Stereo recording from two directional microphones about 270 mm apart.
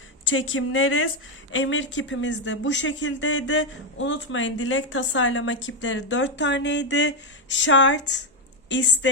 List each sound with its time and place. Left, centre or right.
0.3 s speech: left